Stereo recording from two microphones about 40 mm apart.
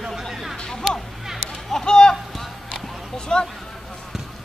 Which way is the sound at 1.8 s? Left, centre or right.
Centre.